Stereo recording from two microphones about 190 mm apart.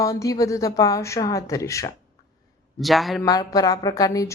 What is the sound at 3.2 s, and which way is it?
Speech, 20° left (ahead or behind).